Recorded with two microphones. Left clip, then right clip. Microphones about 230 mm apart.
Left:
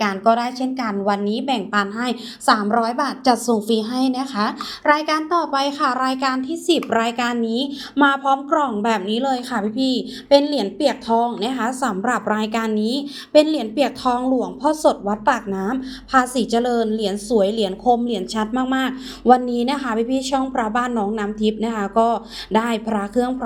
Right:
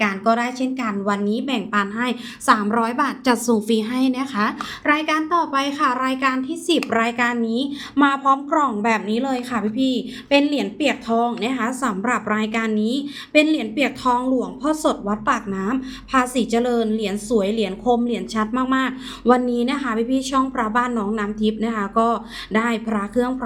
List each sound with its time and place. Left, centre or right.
0.0 s a woman's voice: centre
3.0 s a woman's voice: right
5.5 s a woman's voice: centre
10.5 s a woman's voice: centre
10.8 s a woman's voice: centre